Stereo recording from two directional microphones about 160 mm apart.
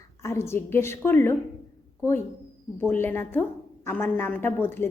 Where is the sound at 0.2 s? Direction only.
15° left (ahead or behind).